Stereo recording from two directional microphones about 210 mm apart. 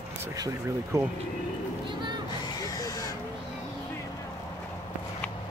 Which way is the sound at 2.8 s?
15° left (ahead or behind).